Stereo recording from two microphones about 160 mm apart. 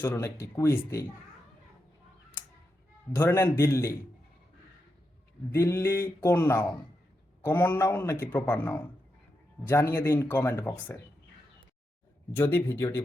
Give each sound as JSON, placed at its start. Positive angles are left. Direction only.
{"t": 0.0, "sound": "speech", "side_deg": 15}
{"t": 3.2, "sound": "speech", "side_deg": 15}
{"t": 5.5, "sound": "speech", "side_deg": 20}
{"t": 12.3, "sound": "speech", "side_deg": 15}